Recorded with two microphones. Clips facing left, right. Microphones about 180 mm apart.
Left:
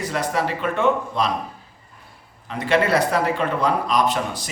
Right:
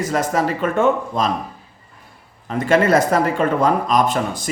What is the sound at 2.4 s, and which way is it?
Speech, 45° right (ahead or behind).